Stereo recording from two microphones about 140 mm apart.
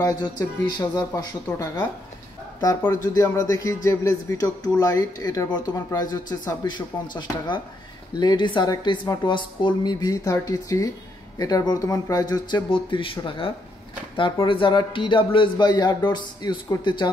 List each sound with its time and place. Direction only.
0.0 s speech: 30° left (ahead or behind)
3.2 s a man's voice: 25° left (ahead or behind)